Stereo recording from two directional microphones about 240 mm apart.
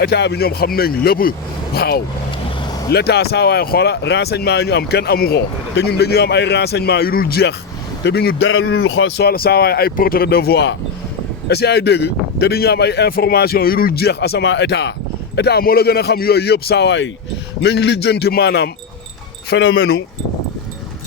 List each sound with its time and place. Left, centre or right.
0.0 s speech: left